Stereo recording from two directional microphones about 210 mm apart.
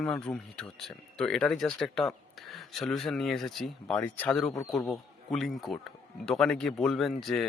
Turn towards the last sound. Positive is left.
turn(degrees=0)  # may be behind; listen again after turning